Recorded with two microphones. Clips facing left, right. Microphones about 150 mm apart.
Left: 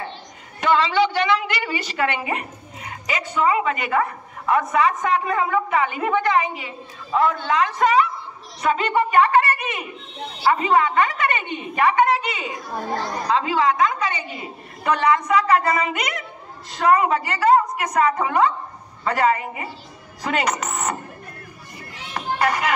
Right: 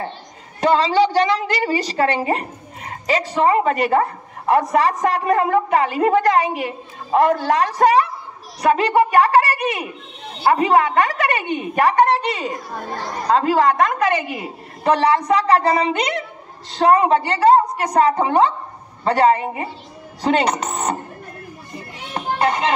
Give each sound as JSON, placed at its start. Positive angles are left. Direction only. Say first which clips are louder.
{"t": 0.6, "sound": "a woman's voice", "louder": "right 3 dB", "side_deg": -35}
{"t": 14.8, "sound": "a woman's voice", "louder": "right 3 dB", "side_deg": -35}
{"t": 22.1, "sound": "children playing", "louder": "right 2 dB", "side_deg": -25}